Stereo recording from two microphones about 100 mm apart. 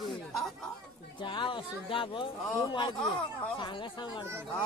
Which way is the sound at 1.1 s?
50° left (ahead or behind).